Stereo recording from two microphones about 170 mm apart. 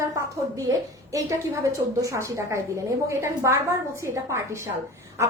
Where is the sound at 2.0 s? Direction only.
15° right (ahead or behind).